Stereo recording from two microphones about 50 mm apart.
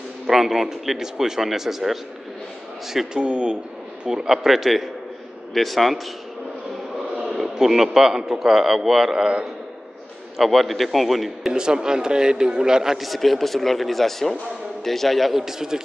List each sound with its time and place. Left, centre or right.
0.3 s a man's voice: centre
3.2 s a man's voice: centre
7.2 s a man's voice: centre
10.3 s a man's voice: centre
11.5 s a man's voice: centre